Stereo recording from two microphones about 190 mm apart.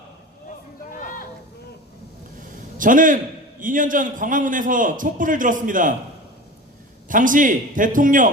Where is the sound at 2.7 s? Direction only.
45° right (ahead or behind).